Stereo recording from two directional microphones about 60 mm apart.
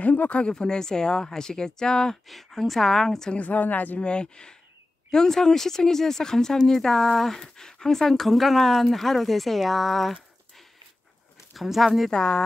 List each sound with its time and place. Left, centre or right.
0.0 s a woman's voice: left; by 3.3 s centre
3.3 s speech: left
4.0 s a woman's voice: centre
11.5 s speech: centre
12.1 s a woman's voice: centre